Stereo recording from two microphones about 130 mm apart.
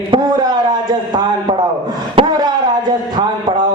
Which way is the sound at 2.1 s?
35° right (ahead or behind).